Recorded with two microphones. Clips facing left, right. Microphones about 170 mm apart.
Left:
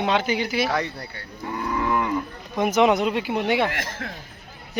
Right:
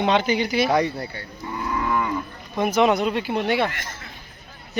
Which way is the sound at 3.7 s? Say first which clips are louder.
Left 6 dB; 90° left.